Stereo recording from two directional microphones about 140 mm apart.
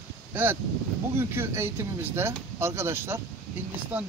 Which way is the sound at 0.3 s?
15° right (ahead or behind).